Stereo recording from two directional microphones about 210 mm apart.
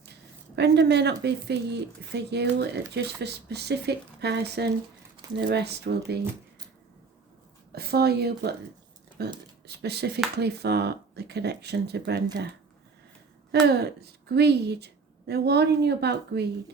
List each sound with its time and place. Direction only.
0.0 s a woman's voice: 55° right (ahead or behind)
7.8 s a woman's voice: 50° right (ahead or behind)
13.5 s a woman's voice: 50° right (ahead or behind)